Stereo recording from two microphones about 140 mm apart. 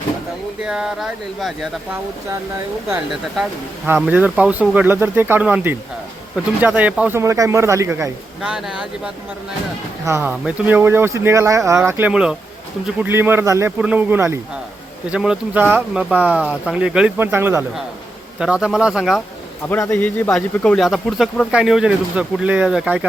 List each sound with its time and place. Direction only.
0.6 s speech: 5° right (ahead or behind)
3.9 s speech: 10° right (ahead or behind)
7.2 s speech: 20° right (ahead or behind)
8.4 s speech: 5° right (ahead or behind)
10.1 s speech: 20° right (ahead or behind)
18.3 s speech: 5° right (ahead or behind)
19.6 s a man's voice: 20° left (ahead or behind); by 23.0 s 5° right (ahead or behind)